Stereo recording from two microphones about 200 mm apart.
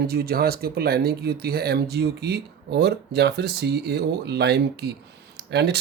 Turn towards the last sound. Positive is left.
turn(degrees=-55)  # may be behind; listen again after turning